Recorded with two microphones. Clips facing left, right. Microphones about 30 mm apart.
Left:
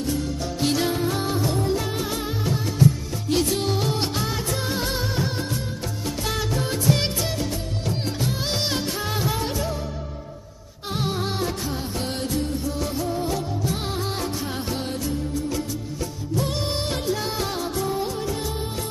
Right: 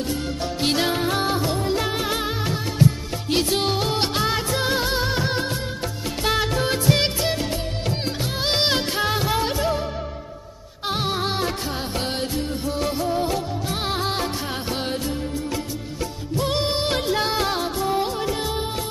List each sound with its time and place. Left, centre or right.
0.0 s music: right
6.2 s music: right
8.5 s music: right
9.1 s music: right
10.9 s music: right